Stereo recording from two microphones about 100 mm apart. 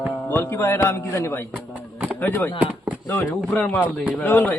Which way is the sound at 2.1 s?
20° left (ahead or behind).